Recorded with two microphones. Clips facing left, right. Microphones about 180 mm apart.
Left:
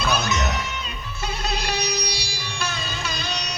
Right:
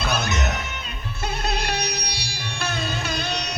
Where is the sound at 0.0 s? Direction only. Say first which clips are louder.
Left 2 dB; 60° right (ahead or behind).